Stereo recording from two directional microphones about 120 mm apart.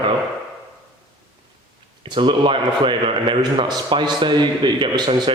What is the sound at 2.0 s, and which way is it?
A man's voice, 45° right (ahead or behind).